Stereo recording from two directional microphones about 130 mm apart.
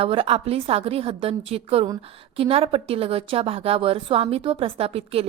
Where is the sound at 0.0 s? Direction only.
50° right (ahead or behind).